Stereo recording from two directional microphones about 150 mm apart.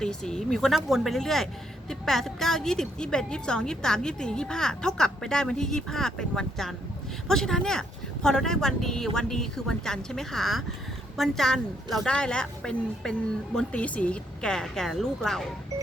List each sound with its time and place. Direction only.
0.0 s a woman's voice: 5° left (ahead or behind)